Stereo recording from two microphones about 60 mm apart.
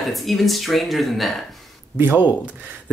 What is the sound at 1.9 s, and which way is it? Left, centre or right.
Speech, right.